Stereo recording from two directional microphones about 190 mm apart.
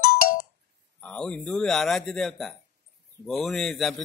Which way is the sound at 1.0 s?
5° left (ahead or behind).